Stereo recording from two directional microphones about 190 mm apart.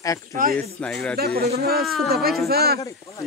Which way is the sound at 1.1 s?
55° right (ahead or behind).